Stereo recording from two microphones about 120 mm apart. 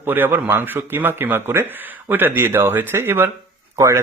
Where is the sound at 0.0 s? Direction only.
15° right (ahead or behind).